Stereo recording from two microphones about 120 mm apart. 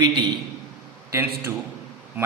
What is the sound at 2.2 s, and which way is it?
Speech, 15° right (ahead or behind).